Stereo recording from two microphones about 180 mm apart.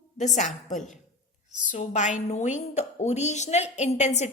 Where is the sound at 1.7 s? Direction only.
40° left (ahead or behind).